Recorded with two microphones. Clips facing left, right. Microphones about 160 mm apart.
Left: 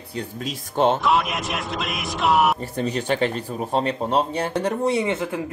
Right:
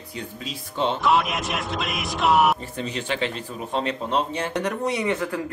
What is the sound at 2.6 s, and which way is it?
Speech, 40° left (ahead or behind).